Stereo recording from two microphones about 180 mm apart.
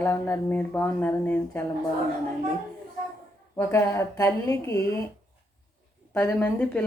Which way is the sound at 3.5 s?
15° left (ahead or behind).